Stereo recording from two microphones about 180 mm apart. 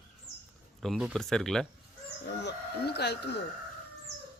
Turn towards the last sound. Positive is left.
turn(degrees=65)  # may be behind; listen again after turning